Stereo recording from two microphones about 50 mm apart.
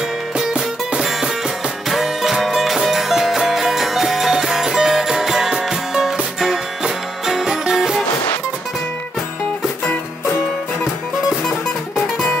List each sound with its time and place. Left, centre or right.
0.4 s music: centre
1.9 s music: centre